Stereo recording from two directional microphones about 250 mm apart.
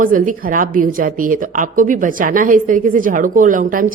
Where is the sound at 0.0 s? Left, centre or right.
Right.